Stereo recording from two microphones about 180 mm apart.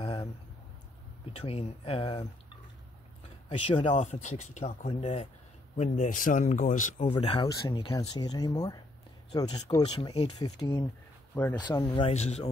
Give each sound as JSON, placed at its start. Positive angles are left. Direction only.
{"t": 0.0, "sound": "a sound", "side_deg": 30}
{"t": 1.3, "sound": "speech", "side_deg": 30}
{"t": 3.4, "sound": "speech", "side_deg": 30}
{"t": 3.9, "sound": "speech", "side_deg": 40}
{"t": 7.2, "sound": "speech", "side_deg": 30}
{"t": 7.4, "sound": "speech", "side_deg": 20}